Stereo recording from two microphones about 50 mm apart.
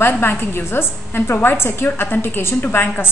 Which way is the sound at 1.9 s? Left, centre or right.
Left.